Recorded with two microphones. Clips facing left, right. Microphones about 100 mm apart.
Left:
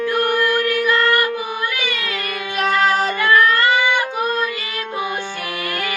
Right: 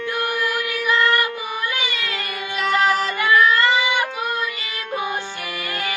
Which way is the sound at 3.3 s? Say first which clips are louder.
Left 1 dB; 50° left (ahead or behind).